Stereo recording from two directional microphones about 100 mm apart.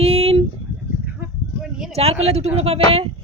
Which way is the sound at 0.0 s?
85° right.